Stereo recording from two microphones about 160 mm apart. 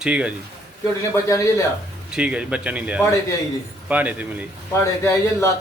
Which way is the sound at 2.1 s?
5° right (ahead or behind).